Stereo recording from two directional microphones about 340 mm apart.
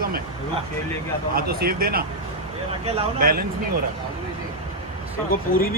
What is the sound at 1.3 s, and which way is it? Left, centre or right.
A man's voice, right.